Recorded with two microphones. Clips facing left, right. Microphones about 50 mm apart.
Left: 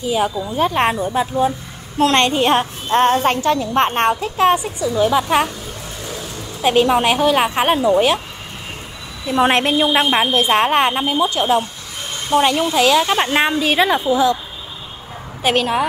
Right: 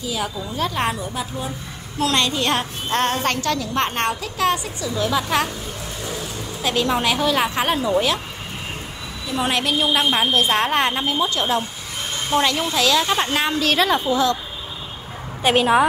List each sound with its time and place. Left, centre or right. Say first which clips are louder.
0.0 s speech: left 7 dB; left
1.0 s a woman's voice: left 10 dB; left
2.4 s a child's voice: left 6 dB; centre
6.6 s speech: left 6 dB; left
9.3 s a woman's voice: left 6 dB; left; by 11.6 s centre
12.3 s speech: left 4 dB; centre
12.7 s speech: left 3 dB; centre
13.5 s a child's voice: left 3 dB; centre
15.5 s a woman's voice: right 3 dB; centre